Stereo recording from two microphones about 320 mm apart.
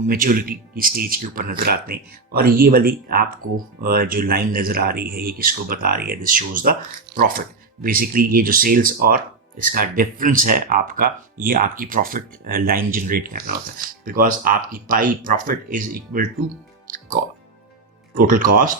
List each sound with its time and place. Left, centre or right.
0.1 s speech: right
16.9 s music: right
18.2 s speech: right